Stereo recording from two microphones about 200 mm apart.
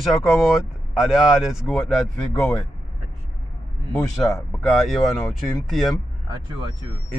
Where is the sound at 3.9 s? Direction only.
5° left (ahead or behind).